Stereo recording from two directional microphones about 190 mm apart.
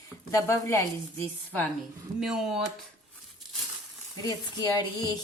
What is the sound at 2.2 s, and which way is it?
Speech, 5° right (ahead or behind).